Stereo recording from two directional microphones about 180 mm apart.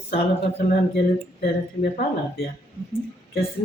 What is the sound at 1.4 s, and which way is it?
Speech, 60° left (ahead or behind).